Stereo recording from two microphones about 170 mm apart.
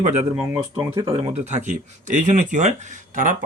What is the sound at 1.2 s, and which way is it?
Speech, 40° right (ahead or behind).